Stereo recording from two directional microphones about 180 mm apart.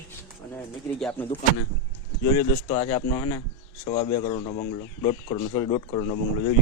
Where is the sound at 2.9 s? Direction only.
20° left (ahead or behind).